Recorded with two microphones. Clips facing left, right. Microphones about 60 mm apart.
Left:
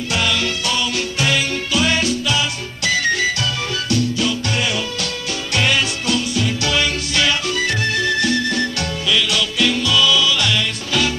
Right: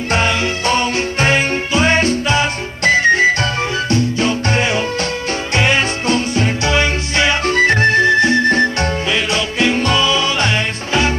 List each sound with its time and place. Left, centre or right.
0.1 s music: right